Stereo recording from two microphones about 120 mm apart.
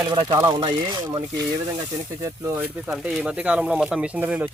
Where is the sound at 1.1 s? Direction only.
30° right (ahead or behind).